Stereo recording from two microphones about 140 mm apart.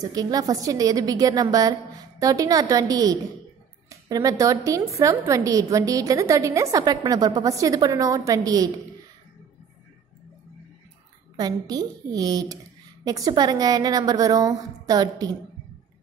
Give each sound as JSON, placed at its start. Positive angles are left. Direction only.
{"t": 0.0, "sound": "a woman's voice", "side_deg": -25}
{"t": 11.3, "sound": "a woman's voice", "side_deg": -30}